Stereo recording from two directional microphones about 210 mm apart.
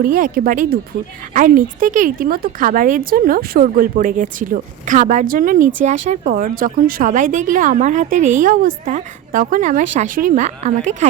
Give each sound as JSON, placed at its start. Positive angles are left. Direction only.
{"t": 0.0, "sound": "a woman's voice", "side_deg": -40}